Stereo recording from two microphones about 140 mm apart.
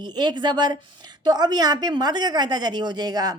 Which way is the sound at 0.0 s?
30° right (ahead or behind).